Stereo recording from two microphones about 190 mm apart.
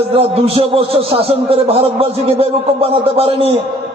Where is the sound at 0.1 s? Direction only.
30° right (ahead or behind).